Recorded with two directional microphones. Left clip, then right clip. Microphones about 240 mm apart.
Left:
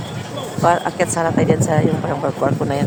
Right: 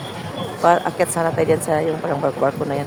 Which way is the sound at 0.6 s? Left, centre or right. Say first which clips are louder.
Even; centre.